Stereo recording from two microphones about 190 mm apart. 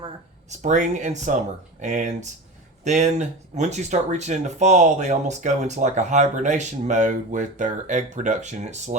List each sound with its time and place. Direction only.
0.6 s speech: 40° right (ahead or behind)